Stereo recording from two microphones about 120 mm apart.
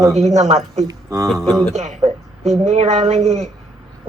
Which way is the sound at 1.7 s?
75° right (ahead or behind).